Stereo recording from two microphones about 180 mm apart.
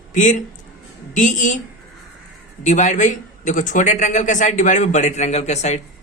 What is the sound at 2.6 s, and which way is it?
Speech, 40° left (ahead or behind).